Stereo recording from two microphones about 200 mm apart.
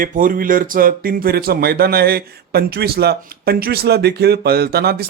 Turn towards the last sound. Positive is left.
turn(degrees=-50)  # may be behind; listen again after turning